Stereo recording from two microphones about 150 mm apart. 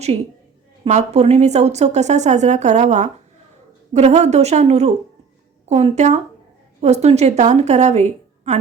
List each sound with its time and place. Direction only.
0.9 s speech: 45° right (ahead or behind)